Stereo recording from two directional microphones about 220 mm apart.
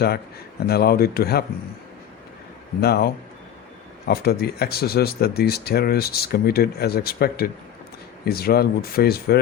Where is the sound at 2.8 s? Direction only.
45° left (ahead or behind).